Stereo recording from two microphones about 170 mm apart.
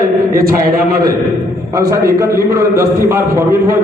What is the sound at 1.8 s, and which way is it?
A man's voice, 20° right (ahead or behind).